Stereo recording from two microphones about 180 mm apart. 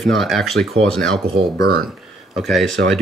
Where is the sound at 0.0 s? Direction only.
Centre (ahead or behind).